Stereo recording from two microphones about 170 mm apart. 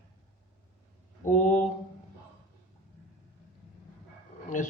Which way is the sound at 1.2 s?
50° left (ahead or behind).